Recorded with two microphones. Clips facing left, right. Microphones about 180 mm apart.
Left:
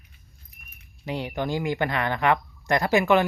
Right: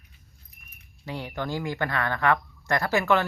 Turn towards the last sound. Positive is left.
turn(degrees=15)  # may be behind; listen again after turning